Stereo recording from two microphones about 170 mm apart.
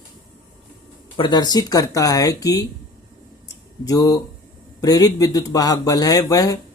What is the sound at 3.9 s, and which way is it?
Speech, 20° left (ahead or behind).